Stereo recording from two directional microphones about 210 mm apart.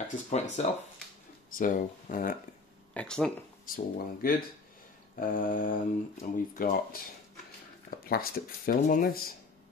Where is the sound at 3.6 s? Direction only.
45° left (ahead or behind).